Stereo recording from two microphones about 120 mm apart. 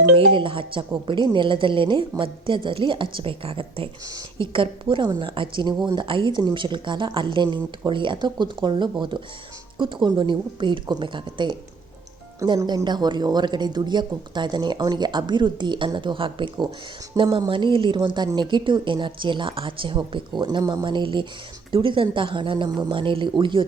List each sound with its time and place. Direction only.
0.3 s a woman's voice: 45° right (ahead or behind)